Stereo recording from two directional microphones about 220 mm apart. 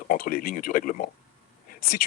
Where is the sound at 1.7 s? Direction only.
40° left (ahead or behind).